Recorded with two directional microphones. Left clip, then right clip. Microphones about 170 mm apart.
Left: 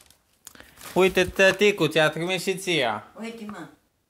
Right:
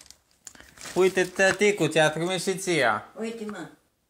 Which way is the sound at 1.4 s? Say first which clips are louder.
Left 3 dB; 25° left (ahead or behind).